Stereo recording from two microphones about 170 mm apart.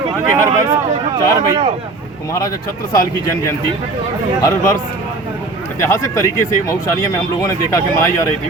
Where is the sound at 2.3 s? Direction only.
20° left (ahead or behind).